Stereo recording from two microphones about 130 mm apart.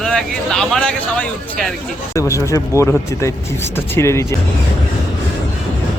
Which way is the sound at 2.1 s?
25° left (ahead or behind).